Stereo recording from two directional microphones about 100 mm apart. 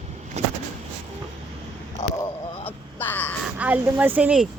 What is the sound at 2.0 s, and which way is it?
Speech, 35° left (ahead or behind).